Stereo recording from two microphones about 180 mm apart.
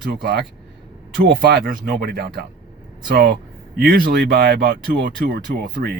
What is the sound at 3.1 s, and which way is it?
Speech, 60° right (ahead or behind).